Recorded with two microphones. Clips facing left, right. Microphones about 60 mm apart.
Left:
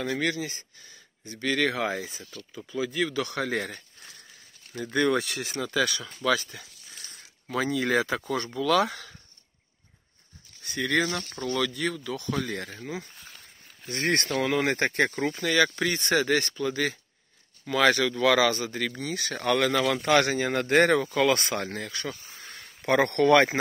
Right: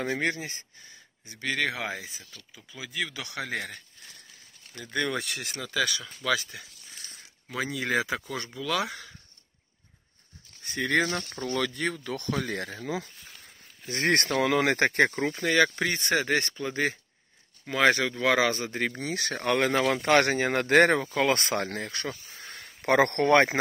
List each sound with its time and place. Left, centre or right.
0.2 s speech: right; by 3.8 s centre
4.9 s speech: centre
10.6 s speech: right
11.1 s speech: centre
11.4 s speech: right
12.4 s speech: right
13.9 s speech: right
15.0 s speech: right
15.4 s speech: right
18.9 s speech: right
19.3 s speech: right
22.4 s a sound: right
22.8 s speech: right
23.2 s speech: right